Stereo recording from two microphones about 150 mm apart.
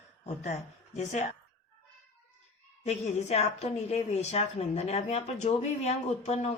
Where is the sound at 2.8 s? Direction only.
45° left (ahead or behind).